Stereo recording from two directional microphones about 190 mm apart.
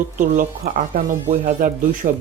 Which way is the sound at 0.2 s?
40° right (ahead or behind).